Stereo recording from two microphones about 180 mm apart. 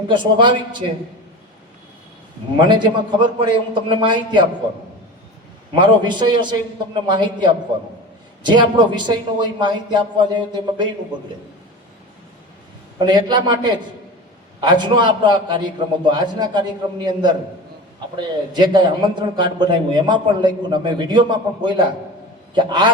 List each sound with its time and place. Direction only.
0.1 s a man's voice: 25° right (ahead or behind)
2.6 s a man's voice: 25° right (ahead or behind)
5.7 s a man's voice: 25° right (ahead or behind)
13.0 s a man's voice: 25° right (ahead or behind)